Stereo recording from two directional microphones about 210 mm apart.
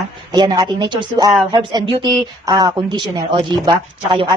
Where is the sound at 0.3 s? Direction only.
20° right (ahead or behind).